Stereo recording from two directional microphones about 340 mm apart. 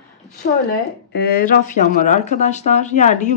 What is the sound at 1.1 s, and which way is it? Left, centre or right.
Speech, left.